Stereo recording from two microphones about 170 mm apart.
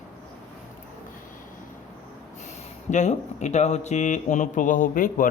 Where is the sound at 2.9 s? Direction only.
45° left (ahead or behind).